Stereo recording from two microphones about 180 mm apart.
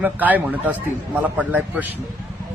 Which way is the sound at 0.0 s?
10° right (ahead or behind).